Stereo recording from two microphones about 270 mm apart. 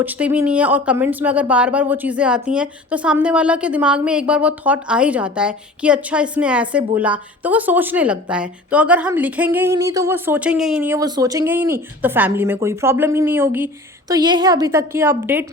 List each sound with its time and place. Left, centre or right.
0.0 s a woman's voice: centre